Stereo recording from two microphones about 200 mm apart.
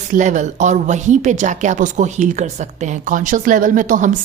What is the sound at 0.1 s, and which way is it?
A woman's voice, 35° right (ahead or behind).